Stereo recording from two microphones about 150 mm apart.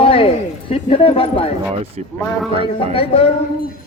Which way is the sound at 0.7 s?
40° left (ahead or behind).